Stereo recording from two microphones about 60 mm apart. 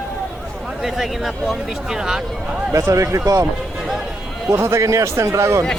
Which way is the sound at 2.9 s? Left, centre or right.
Right.